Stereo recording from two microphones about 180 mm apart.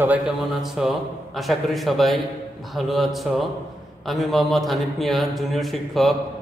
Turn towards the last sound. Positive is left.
turn(degrees=0)  # may be behind; listen again after turning